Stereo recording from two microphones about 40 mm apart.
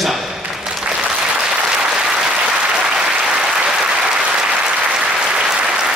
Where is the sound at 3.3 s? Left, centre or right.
Right.